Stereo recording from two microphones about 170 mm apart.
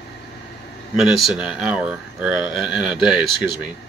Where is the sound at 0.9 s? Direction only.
Centre (ahead or behind).